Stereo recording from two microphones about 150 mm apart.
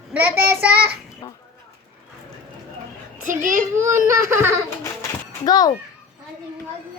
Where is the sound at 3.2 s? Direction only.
60° right (ahead or behind).